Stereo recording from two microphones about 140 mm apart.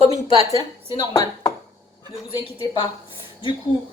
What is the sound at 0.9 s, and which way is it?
Speech, 35° left (ahead or behind).